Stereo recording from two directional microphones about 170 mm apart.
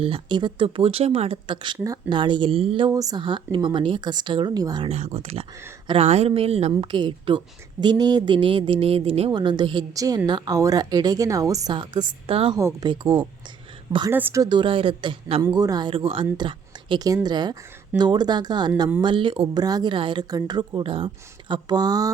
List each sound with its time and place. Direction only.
0.0 s a woman's voice: 30° right (ahead or behind)
4.9 s a woman's voice: 40° right (ahead or behind)
12.5 s a woman's voice: 20° right (ahead or behind)
14.1 s a woman's voice: 10° right (ahead or behind)